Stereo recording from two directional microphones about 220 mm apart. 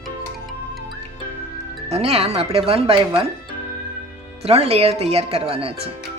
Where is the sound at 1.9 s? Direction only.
25° right (ahead or behind).